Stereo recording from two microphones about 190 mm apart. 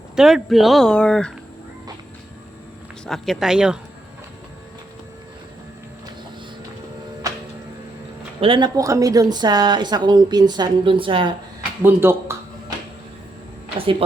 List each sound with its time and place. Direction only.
0.2 s speech: centre (ahead or behind)
3.1 s speech: centre (ahead or behind)
8.4 s a woman's voice: 25° right (ahead or behind)
11.8 s speech: 10° right (ahead or behind)